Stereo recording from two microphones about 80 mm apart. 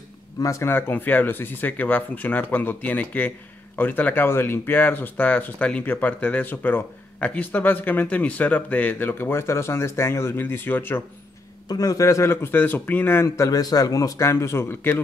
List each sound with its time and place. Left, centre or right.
0.4 s speech: left
11.7 s a man's voice: left
13.5 s a man's voice: left